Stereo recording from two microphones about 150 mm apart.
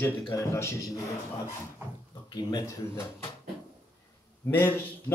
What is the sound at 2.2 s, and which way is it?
A man's voice, 25° left (ahead or behind).